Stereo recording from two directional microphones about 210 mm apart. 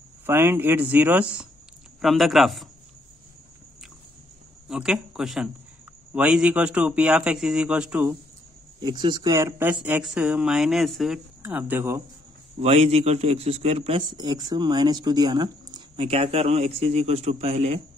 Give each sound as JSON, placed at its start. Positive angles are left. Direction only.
{"t": 0.3, "sound": "speech", "side_deg": -10}
{"t": 4.6, "sound": "speech", "side_deg": -5}
{"t": 8.8, "sound": "a man's voice", "side_deg": -20}
{"t": 12.5, "sound": "a man's voice", "side_deg": -30}